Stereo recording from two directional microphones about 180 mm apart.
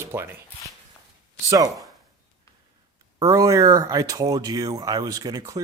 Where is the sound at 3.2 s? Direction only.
15° right (ahead or behind).